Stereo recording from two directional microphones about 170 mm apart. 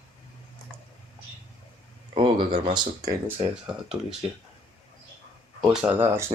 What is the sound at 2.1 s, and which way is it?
Speech, 30° right (ahead or behind).